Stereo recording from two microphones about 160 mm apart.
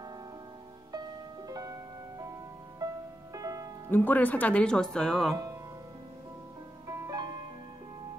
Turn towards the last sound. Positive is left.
turn(degrees=-20)  # may be behind; listen again after turning